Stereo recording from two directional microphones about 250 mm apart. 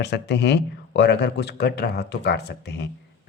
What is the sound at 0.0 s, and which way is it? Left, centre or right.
A man's voice, left.